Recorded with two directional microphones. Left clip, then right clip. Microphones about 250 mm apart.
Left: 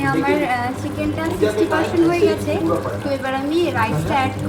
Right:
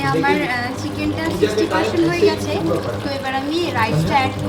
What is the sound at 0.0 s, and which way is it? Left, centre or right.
A woman's voice, centre.